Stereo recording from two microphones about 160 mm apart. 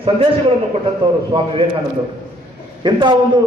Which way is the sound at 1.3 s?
35° right (ahead or behind).